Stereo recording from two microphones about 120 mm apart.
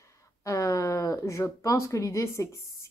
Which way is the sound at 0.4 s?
25° left (ahead or behind).